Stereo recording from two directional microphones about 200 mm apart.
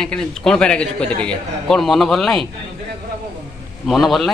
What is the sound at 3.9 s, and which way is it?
Speech, centre (ahead or behind).